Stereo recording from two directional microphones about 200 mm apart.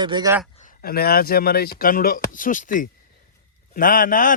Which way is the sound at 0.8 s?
50° left (ahead or behind).